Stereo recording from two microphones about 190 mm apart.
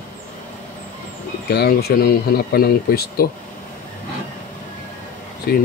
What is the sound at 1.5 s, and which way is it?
Speech, 55° left (ahead or behind).